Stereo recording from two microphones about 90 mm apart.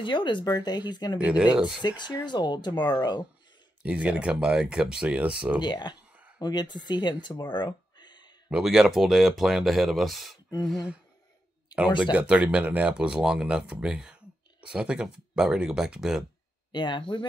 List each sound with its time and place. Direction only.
0.0 s speech: 60° left (ahead or behind)
1.1 s speech: 15° right (ahead or behind)
1.8 s speech: 55° left (ahead or behind)
3.8 s speech: 15° right (ahead or behind)
5.6 s speech: 55° left (ahead or behind)
7.4 s a sound: 55° left (ahead or behind)
8.5 s speech: 5° right (ahead or behind)
12.0 s speech: 15° right (ahead or behind)
16.7 s speech: 60° left (ahead or behind)